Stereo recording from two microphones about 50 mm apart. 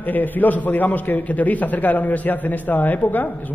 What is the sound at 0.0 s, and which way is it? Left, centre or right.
A man's voice, left.